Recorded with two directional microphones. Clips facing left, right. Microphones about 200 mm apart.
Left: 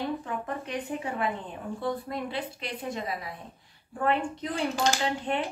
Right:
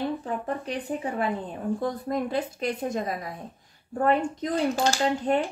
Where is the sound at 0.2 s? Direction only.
35° right (ahead or behind).